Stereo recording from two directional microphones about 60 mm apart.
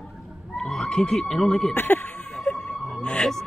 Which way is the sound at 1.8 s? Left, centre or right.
Left.